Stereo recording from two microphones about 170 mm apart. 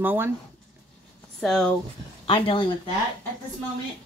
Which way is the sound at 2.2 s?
30° left (ahead or behind).